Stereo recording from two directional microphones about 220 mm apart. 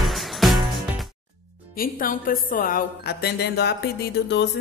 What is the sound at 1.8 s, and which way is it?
A woman's voice, 40° left (ahead or behind).